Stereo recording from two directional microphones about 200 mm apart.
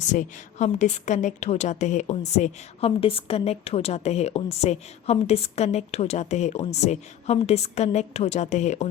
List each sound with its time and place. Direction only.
0.0 s a woman's voice: 35° left (ahead or behind)